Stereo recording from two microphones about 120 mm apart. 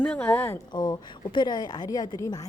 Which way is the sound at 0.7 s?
35° left (ahead or behind).